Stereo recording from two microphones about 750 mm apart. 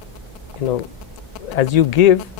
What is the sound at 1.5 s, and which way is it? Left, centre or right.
Speech, left.